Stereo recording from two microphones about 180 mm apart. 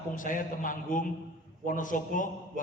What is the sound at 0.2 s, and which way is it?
A man's voice, 45° left (ahead or behind).